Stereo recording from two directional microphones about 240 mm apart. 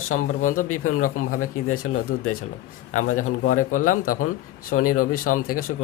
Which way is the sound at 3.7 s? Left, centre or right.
Left.